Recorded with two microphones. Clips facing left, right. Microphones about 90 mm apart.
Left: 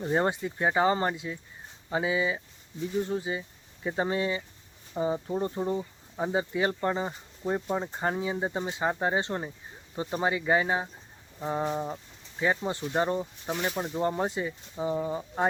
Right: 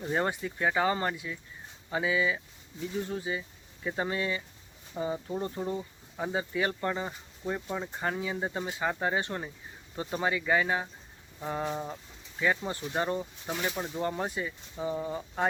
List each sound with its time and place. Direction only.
0.0 s speech: 25° left (ahead or behind)
11.3 s a sound: 15° left (ahead or behind)
12.4 s speech: 25° left (ahead or behind)